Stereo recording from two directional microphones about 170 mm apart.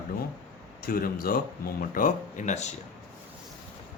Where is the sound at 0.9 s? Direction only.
60° left (ahead or behind); by 2.7 s 45° left (ahead or behind).